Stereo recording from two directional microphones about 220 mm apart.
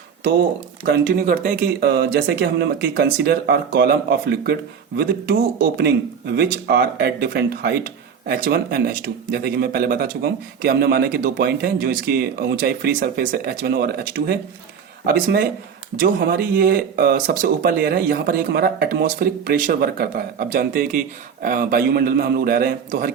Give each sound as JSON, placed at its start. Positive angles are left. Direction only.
{"t": 0.9, "sound": "speech", "side_deg": -45}